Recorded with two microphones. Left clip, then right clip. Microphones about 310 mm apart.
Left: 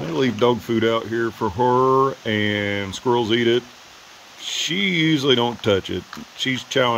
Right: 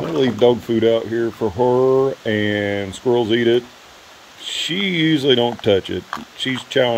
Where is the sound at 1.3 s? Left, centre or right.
Left.